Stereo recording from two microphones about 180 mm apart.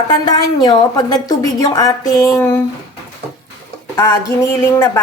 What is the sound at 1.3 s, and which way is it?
Speech, 20° left (ahead or behind).